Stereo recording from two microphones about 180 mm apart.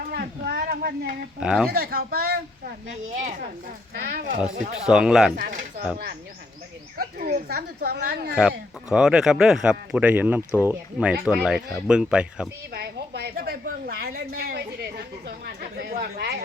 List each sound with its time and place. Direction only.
0.0 s a sound: 60° right (ahead or behind)
1.4 s speech: 5° right (ahead or behind)
1.7 s speech: 55° right (ahead or behind)
3.2 s speech: 50° right (ahead or behind)
3.9 s speech: 60° right (ahead or behind)
4.5 s speech: 40° right (ahead or behind)
4.9 s speech: 5° right (ahead or behind)
5.4 s speech: 50° right (ahead or behind)
6.9 s speech: 55° right (ahead or behind)
8.4 s speech: 5° right (ahead or behind)
12.7 s a woman's voice: 65° right (ahead or behind)